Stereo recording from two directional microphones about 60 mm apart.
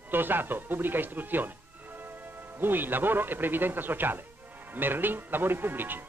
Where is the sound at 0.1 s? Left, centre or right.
Right.